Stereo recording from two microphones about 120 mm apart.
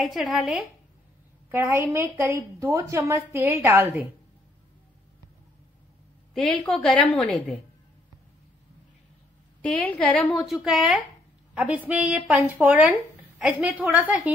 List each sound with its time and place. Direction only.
0.0 s a woman's voice: centre (ahead or behind)
1.5 s a woman's voice: 15° right (ahead or behind)
6.3 s a woman's voice: 5° left (ahead or behind)
9.6 s a woman's voice: 10° left (ahead or behind); by 14.3 s 10° right (ahead or behind)